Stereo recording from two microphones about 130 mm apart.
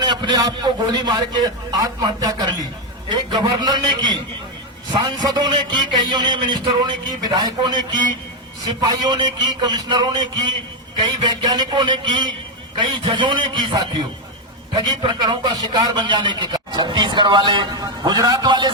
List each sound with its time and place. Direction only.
0.0 s a man's voice: 35° right (ahead or behind)